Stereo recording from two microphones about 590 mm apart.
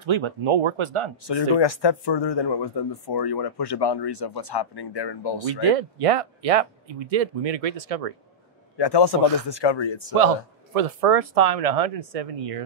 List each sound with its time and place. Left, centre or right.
0.0 s speech: right
1.6 s speech: left
5.6 s speech: right
8.7 s speech: left
10.1 s speech: right